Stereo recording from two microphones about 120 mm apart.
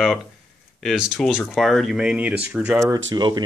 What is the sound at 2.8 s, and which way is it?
Speech, 35° right (ahead or behind).